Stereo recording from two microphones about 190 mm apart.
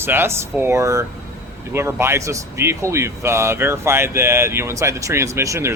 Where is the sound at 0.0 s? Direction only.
10° right (ahead or behind).